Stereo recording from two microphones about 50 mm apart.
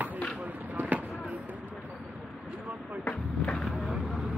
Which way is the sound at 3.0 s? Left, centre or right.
Left.